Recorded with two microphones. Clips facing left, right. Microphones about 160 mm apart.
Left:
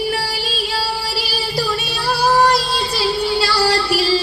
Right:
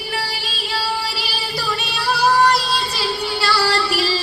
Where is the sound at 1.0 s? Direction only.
40° left (ahead or behind).